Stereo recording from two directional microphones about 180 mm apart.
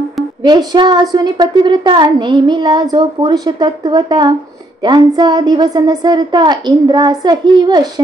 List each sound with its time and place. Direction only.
0.4 s a woman's voice: 25° right (ahead or behind)